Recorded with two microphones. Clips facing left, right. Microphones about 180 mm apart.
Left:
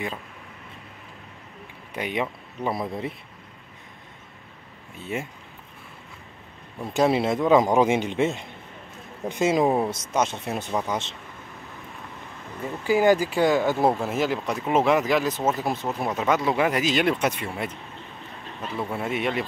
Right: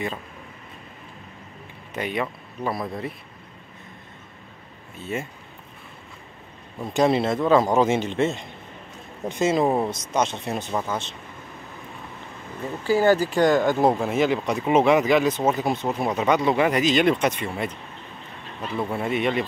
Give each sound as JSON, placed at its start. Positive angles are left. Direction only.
{"t": 2.0, "sound": "speech", "side_deg": 15}
{"t": 6.9, "sound": "a man's voice", "side_deg": 5}
{"t": 10.9, "sound": "speech", "side_deg": 20}
{"t": 12.8, "sound": "speech", "side_deg": 15}